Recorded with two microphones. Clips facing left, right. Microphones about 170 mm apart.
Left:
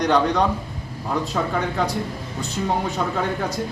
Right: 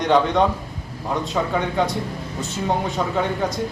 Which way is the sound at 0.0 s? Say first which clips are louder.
Right 1 dB; centre (ahead or behind).